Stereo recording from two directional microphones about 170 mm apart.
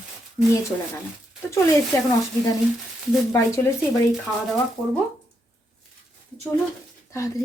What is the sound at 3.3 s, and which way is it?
Speech, 15° left (ahead or behind).